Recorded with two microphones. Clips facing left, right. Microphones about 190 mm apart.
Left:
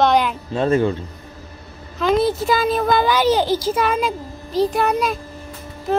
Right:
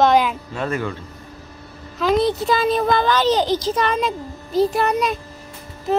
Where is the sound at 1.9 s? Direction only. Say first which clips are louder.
Even; centre (ahead or behind).